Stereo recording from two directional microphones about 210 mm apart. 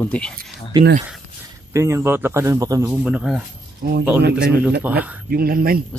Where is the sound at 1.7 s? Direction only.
15° right (ahead or behind).